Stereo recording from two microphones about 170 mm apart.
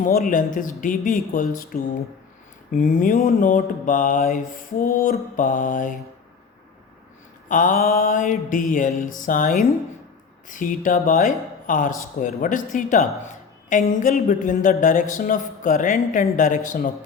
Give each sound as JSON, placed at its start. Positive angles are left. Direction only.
{"t": 0.0, "sound": "speech", "side_deg": 55}
{"t": 7.4, "sound": "speech", "side_deg": 50}